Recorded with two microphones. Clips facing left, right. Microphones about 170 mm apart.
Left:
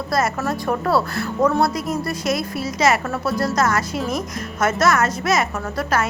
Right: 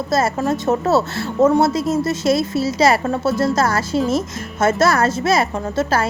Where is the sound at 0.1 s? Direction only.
25° right (ahead or behind).